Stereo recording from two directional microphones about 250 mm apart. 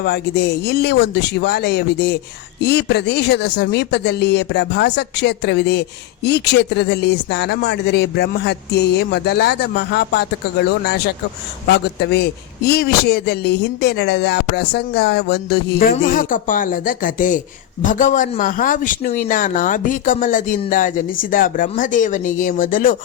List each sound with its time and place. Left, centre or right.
0.0 s a man's voice: left
11.7 s a man's voice: left